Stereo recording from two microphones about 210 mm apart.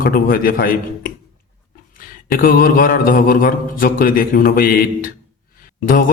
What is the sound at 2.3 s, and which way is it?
A man's voice, 45° left (ahead or behind).